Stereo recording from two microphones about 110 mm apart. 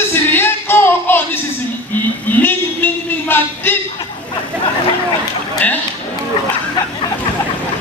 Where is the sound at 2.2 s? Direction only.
15° left (ahead or behind).